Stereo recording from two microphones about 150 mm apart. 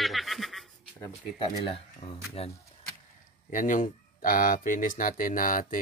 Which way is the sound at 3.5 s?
60° left (ahead or behind).